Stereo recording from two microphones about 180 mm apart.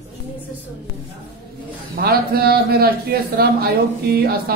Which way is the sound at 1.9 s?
60° right (ahead or behind).